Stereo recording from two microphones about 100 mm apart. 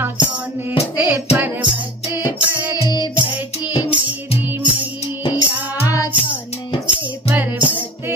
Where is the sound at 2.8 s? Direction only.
45° left (ahead or behind).